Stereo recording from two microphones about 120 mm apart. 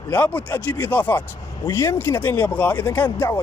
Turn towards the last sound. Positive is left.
turn(degrees=20)  # may be behind; listen again after turning